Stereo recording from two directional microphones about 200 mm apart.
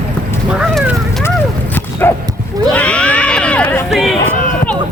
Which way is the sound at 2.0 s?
10° left (ahead or behind).